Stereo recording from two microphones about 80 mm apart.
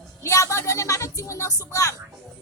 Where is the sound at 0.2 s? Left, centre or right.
Left.